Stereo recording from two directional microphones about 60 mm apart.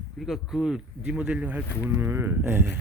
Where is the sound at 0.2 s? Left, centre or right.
Centre; by 1.6 s right.